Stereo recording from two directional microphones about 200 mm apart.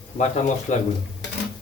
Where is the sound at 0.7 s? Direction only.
35° left (ahead or behind).